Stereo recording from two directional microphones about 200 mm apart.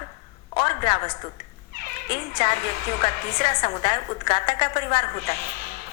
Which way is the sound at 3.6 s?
25° left (ahead or behind).